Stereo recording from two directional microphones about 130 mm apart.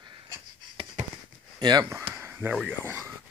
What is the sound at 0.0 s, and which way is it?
Dog, 40° right (ahead or behind).